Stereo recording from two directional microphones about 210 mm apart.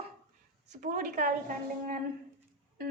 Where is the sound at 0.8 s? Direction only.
40° right (ahead or behind).